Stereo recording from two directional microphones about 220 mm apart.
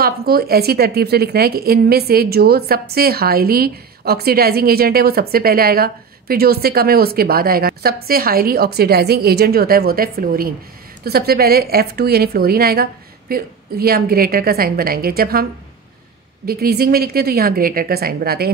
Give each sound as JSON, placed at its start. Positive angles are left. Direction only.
{"t": 0.0, "sound": "a woman's voice", "side_deg": -45}
{"t": 16.4, "sound": "a woman's voice", "side_deg": -45}